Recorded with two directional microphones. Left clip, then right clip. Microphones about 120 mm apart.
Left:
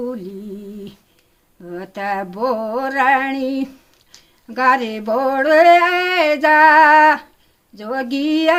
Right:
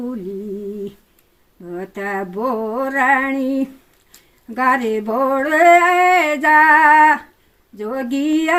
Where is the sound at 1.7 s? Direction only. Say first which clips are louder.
Left 1 dB; 50° left (ahead or behind).